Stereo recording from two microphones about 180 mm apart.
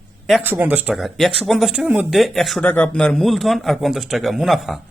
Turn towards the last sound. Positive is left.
turn(degrees=0)  # may be behind; listen again after turning